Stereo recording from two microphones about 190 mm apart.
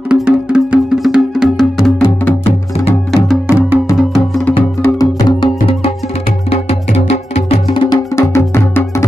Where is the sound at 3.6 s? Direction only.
10° right (ahead or behind).